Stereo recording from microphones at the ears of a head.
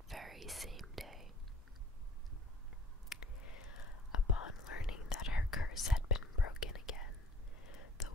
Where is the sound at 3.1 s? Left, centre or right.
Left.